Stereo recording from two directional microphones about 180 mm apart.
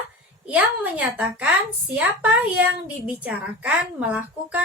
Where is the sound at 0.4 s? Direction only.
10° right (ahead or behind).